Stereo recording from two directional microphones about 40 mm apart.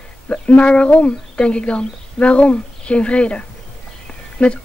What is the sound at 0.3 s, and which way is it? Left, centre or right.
Speech, left.